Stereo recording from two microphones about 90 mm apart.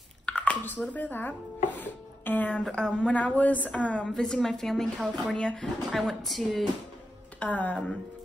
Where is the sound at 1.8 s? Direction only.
20° left (ahead or behind).